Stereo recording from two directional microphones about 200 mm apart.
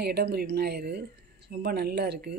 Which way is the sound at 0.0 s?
55° right (ahead or behind).